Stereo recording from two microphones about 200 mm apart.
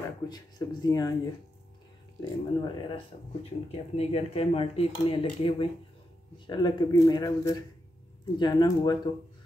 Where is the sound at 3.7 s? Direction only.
30° left (ahead or behind).